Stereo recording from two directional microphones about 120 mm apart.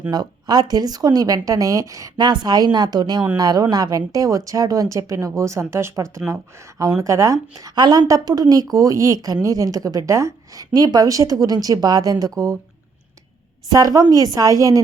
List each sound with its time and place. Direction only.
0.1 s a woman's voice: 35° right (ahead or behind)
13.7 s a woman's voice: 30° right (ahead or behind)